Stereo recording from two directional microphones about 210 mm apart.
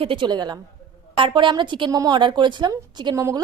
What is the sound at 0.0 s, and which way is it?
A woman's voice, 25° right (ahead or behind).